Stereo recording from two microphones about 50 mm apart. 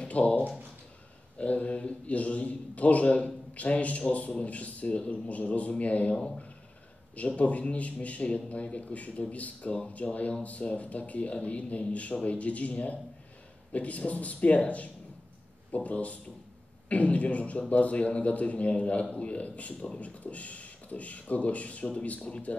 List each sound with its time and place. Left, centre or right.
0.1 s speech: left
1.4 s a man's voice: left
6.1 s speech: centre
7.3 s a man's voice: left